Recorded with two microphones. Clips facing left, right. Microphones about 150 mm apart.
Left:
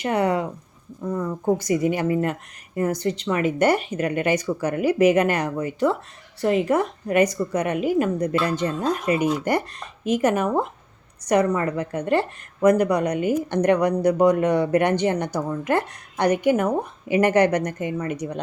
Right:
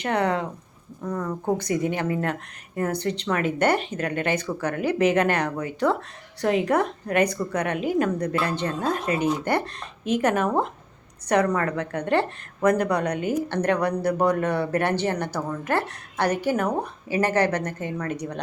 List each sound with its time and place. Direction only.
0.0 s speech: 10° left (ahead or behind)
1.0 s speech: 20° left (ahead or behind)
1.7 s speech: 10° left (ahead or behind)
2.7 s speech: 50° right (ahead or behind)
3.0 s speech: 10° left (ahead or behind)